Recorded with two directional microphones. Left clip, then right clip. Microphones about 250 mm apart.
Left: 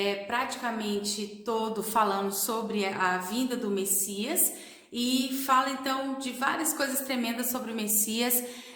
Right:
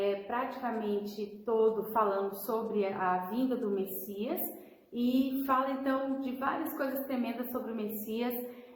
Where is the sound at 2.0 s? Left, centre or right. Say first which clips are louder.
Left 5 dB; left.